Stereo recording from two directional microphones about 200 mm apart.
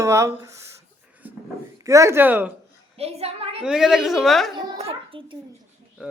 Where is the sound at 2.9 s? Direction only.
30° right (ahead or behind).